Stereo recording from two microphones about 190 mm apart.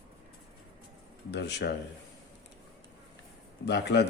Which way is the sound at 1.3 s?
65° left (ahead or behind).